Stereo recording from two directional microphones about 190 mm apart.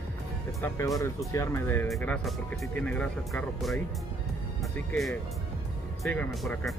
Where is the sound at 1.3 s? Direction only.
15° left (ahead or behind).